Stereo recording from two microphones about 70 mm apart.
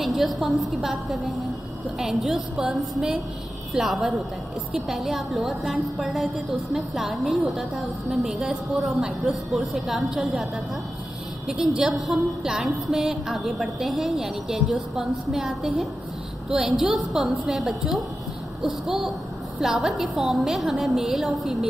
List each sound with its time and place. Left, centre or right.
0.0 s a woman's voice: centre